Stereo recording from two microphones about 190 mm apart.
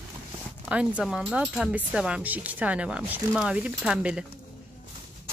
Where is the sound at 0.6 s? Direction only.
5° right (ahead or behind).